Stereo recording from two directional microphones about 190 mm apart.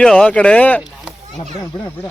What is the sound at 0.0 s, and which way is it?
Speech, 5° left (ahead or behind).